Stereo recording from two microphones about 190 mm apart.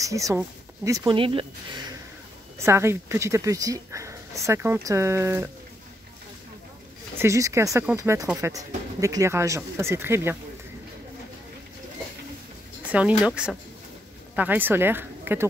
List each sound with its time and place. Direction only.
0.0 s speech: 15° right (ahead or behind)
2.6 s speech: 15° right (ahead or behind)
7.2 s speech: 15° right (ahead or behind)
13.2 s speech: 5° right (ahead or behind)